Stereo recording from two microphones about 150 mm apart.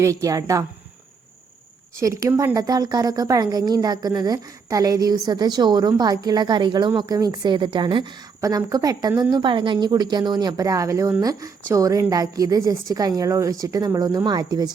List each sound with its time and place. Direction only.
0.0 s speech: 20° right (ahead or behind)
2.0 s speech: 20° right (ahead or behind)